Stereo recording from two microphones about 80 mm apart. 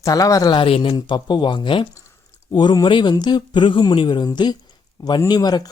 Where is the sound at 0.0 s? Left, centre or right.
Left.